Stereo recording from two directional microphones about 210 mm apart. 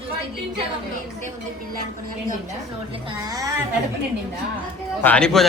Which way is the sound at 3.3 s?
15° right (ahead or behind).